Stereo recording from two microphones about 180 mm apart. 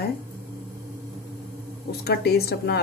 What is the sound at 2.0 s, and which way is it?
Speech, 60° left (ahead or behind).